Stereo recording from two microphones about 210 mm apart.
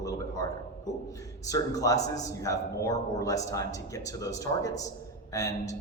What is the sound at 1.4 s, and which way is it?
A man's voice, 15° left (ahead or behind).